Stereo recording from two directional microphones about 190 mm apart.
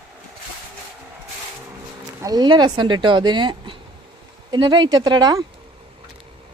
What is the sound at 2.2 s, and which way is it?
A woman's voice, 20° right (ahead or behind).